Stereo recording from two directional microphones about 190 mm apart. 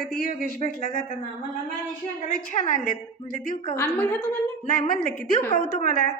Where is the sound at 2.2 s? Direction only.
45° left (ahead or behind).